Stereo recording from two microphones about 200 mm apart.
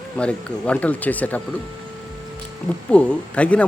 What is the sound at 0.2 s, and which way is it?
Speech, 5° left (ahead or behind).